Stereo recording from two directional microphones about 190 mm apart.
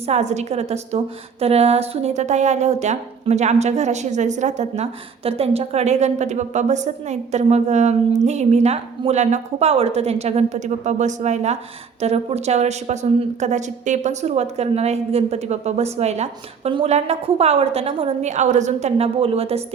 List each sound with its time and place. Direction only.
0.0 s a woman's voice: 35° right (ahead or behind)